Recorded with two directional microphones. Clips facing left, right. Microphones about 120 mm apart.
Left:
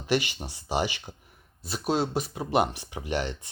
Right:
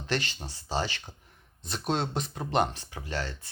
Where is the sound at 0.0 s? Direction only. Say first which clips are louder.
Left 5 dB; 10° left (ahead or behind).